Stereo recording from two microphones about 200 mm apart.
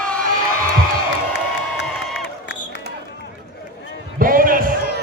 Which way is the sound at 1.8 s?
Centre (ahead or behind).